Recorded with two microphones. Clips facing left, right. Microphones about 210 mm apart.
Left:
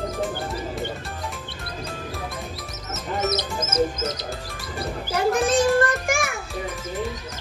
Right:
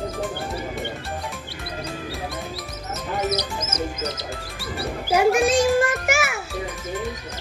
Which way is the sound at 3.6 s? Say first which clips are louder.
Left 5 dB; 50° left (ahead or behind).